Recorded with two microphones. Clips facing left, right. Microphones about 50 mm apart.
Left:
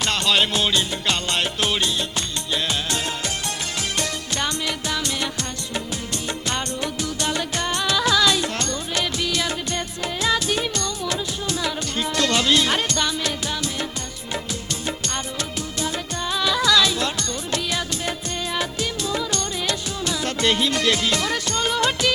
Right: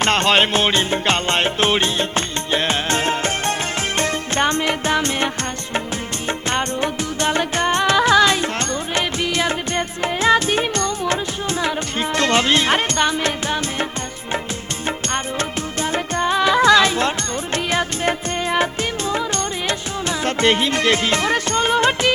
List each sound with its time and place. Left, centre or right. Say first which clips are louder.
0.0 s music: right 5 dB; right
14.8 s music: right 7 dB; right